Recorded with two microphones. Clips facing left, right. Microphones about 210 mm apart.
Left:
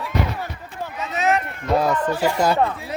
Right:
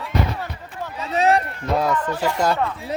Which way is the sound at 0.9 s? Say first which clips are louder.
Right 3 dB; 35° right (ahead or behind).